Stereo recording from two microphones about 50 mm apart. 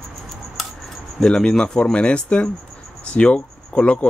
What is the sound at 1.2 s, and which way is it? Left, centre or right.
Speech, centre.